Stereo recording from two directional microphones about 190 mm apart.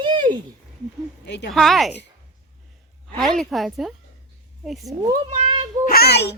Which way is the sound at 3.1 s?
Centre (ahead or behind).